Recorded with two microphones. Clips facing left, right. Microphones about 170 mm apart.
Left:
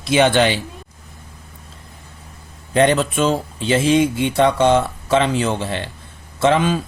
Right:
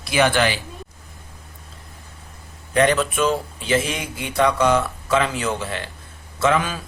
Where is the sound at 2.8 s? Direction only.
25° left (ahead or behind).